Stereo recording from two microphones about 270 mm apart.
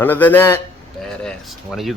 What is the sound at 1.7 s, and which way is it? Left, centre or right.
Speech, centre.